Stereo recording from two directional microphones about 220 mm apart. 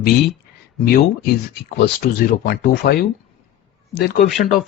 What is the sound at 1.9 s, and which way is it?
Speech, 40° left (ahead or behind).